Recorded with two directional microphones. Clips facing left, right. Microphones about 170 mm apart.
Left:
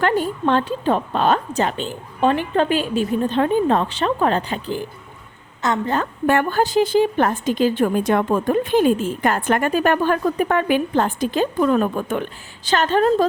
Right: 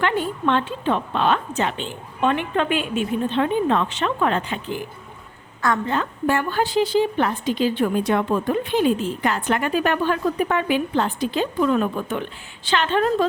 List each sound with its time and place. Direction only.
0.0 s a woman's voice: 40° left (ahead or behind)
6.2 s a woman's voice: 55° left (ahead or behind)